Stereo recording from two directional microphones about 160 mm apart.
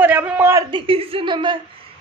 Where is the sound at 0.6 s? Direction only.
35° right (ahead or behind).